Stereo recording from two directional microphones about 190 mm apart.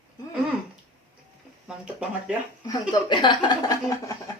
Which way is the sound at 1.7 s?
5° right (ahead or behind).